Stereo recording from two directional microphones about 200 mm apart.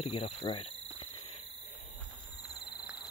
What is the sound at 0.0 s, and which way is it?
Cricket, 30° left (ahead or behind).